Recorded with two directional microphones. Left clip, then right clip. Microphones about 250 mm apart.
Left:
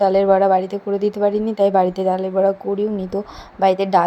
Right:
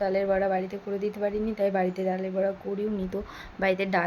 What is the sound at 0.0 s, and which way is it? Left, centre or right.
Speech, left.